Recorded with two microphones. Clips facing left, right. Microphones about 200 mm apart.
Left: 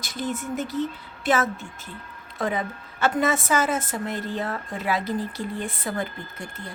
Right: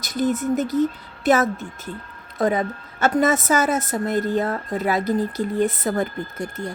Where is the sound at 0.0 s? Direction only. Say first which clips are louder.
Right 8 dB; 40° right (ahead or behind).